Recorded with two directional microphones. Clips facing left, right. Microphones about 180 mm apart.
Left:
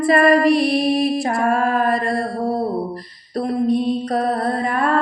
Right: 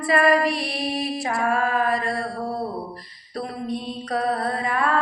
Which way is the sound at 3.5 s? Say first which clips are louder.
Left 14 dB; 50° left (ahead or behind).